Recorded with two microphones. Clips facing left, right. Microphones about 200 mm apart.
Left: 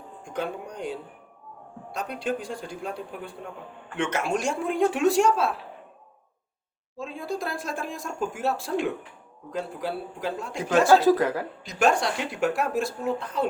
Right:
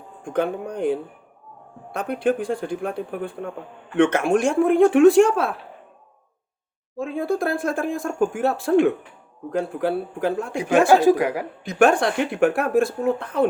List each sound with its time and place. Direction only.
0.3 s speech: 55° right (ahead or behind)
6.9 s speech: 55° right (ahead or behind)
10.5 s a woman's voice: 15° right (ahead or behind)
11.6 s speech: 55° right (ahead or behind)